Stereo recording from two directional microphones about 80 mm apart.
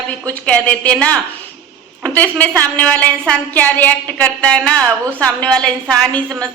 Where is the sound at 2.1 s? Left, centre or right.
Left.